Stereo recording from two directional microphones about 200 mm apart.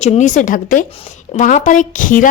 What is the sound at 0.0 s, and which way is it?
Speech, 35° left (ahead or behind).